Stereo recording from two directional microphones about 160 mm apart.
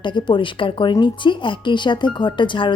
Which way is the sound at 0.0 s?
30° left (ahead or behind).